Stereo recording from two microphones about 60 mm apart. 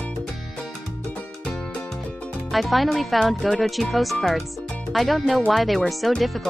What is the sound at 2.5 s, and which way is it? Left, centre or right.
Speech, centre.